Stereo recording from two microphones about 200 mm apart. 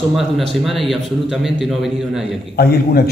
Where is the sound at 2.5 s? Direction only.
50° left (ahead or behind).